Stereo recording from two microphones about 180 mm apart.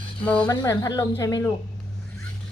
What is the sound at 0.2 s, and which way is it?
Child singing, 5° left (ahead or behind).